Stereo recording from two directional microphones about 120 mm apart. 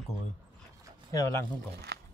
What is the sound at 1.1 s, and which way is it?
Speech, 30° left (ahead or behind).